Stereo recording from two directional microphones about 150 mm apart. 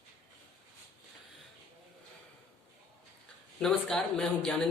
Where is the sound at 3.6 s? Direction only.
5° left (ahead or behind).